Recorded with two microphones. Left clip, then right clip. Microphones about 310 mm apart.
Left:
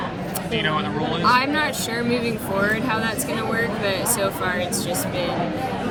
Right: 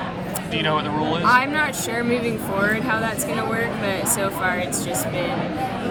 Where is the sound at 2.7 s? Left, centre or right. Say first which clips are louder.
Even; centre.